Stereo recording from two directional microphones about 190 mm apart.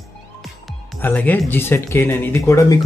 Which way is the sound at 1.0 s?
10° left (ahead or behind).